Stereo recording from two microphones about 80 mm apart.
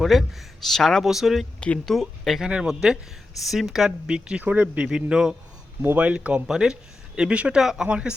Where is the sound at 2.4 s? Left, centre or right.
Centre.